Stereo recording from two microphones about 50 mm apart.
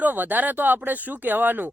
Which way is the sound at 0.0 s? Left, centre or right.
Right.